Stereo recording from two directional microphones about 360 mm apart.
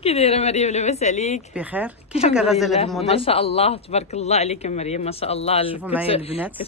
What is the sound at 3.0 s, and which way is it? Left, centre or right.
A man's voice, centre.